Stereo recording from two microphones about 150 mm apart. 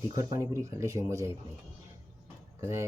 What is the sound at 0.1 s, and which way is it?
Speech, 25° right (ahead or behind).